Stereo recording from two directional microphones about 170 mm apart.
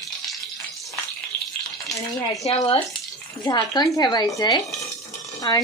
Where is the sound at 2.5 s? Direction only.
35° left (ahead or behind).